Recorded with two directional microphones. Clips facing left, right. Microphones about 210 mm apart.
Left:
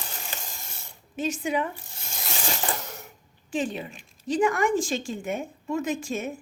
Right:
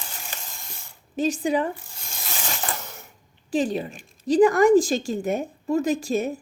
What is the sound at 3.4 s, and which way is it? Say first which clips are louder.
Speech: right 5 dB; 35° right (ahead or behind).